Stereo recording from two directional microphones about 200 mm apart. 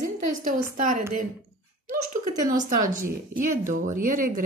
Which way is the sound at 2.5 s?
40° right (ahead or behind).